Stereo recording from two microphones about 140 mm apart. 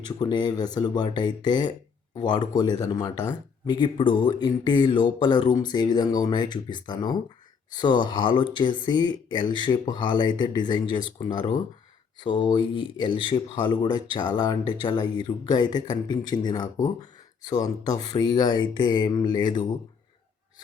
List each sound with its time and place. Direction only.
0.2 s speech: 30° left (ahead or behind)